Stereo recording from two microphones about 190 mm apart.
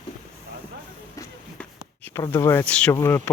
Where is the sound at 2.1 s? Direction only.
15° left (ahead or behind).